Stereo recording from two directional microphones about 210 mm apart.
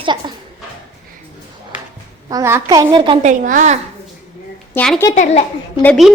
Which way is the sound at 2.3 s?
15° right (ahead or behind).